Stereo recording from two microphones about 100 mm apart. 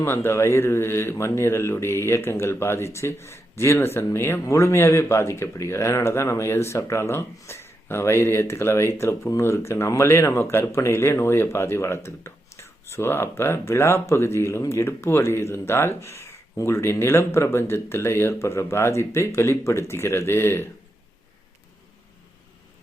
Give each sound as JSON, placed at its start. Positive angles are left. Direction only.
{"t": 0.0, "sound": "speech", "side_deg": 25}